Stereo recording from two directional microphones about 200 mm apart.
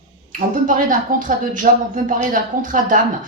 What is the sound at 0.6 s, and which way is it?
Speech, 40° right (ahead or behind).